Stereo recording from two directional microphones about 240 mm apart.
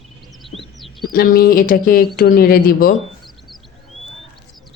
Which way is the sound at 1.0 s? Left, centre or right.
Left.